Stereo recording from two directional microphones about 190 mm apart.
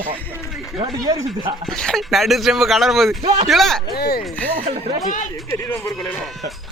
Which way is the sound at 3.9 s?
55° left (ahead or behind).